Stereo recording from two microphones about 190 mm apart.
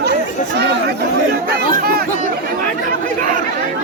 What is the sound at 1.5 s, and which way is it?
Speech, 55° right (ahead or behind).